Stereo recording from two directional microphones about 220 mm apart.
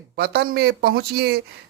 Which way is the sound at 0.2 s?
45° right (ahead or behind).